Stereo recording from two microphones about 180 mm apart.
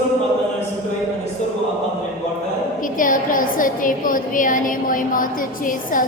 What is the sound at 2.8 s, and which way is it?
A woman's voice, 50° left (ahead or behind).